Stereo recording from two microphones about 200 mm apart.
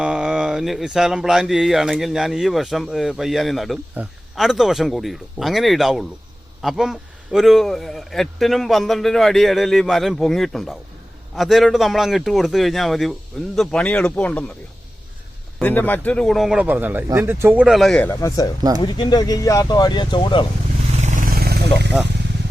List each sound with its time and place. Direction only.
0.0 s speech: 5° right (ahead or behind)
15.6 s speech: 10° left (ahead or behind)
18.1 s speech: 15° left (ahead or behind)
21.0 s wild animals: 45° right (ahead or behind)